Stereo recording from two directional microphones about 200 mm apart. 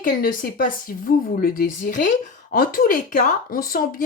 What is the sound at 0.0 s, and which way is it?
Speech, 45° left (ahead or behind).